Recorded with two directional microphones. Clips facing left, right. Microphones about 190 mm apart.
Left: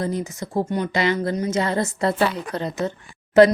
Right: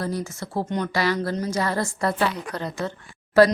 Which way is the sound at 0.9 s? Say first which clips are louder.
Left 2 dB; 20° left (ahead or behind).